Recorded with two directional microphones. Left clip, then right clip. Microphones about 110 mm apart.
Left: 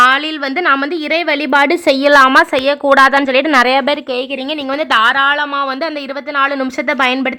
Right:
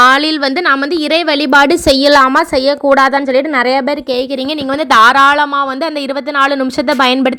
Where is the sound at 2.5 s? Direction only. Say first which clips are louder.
Right 1 dB; 35° right (ahead or behind).